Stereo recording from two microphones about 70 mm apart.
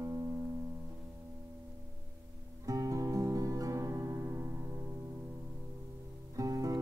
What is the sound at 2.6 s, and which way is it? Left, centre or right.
Music, right.